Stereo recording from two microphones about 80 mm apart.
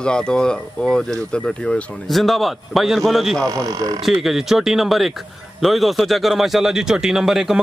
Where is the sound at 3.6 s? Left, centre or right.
Right.